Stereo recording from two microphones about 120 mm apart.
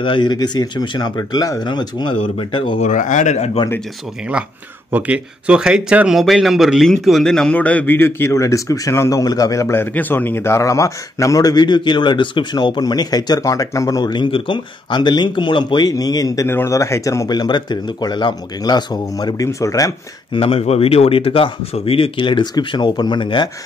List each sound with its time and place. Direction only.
0.0 s speech: 40° left (ahead or behind)
2.8 s speech: 90° left; by 3.5 s 75° left (ahead or behind)
4.9 s speech: 10° right (ahead or behind); by 17.3 s 25° left (ahead or behind)
17.3 s speech: 40° left (ahead or behind)
20.3 s speech: 55° left (ahead or behind)